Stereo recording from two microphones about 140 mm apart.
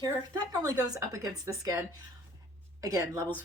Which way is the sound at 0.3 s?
25° right (ahead or behind).